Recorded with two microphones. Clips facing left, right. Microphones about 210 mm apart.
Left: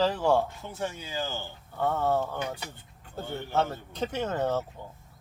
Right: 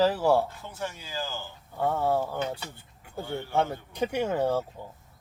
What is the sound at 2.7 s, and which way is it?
Vehicle, 10° right (ahead or behind).